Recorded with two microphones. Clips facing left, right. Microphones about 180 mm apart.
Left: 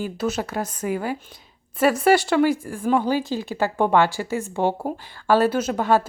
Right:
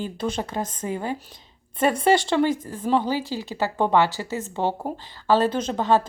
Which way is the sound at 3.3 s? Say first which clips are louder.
Left 2 dB; 15° right (ahead or behind).